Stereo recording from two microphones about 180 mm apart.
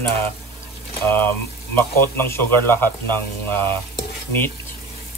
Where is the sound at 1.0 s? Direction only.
10° left (ahead or behind).